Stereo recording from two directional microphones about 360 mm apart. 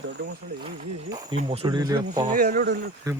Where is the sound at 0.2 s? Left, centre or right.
Right.